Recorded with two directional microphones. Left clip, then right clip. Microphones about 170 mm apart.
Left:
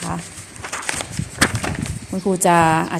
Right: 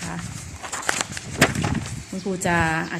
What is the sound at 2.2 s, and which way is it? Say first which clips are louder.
Speech: left 8 dB; 30° left (ahead or behind).